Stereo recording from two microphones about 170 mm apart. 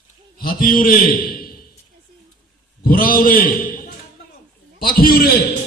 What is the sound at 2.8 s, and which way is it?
A man's voice, 60° left (ahead or behind).